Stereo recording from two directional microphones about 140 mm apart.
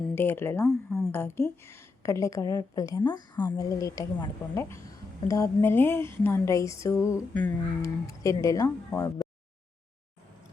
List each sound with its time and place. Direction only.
0.1 s speech: 15° left (ahead or behind)
0.9 s speech: 5° left (ahead or behind)
1.1 s a woman's voice: 15° left (ahead or behind)
8.0 s a woman's voice: 25° left (ahead or behind)